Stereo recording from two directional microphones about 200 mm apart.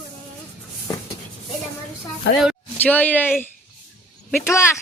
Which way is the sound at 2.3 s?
65° left (ahead or behind).